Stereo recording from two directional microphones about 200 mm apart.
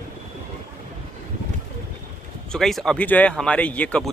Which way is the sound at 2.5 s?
Centre (ahead or behind).